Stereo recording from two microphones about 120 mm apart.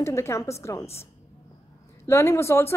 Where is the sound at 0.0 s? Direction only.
25° left (ahead or behind).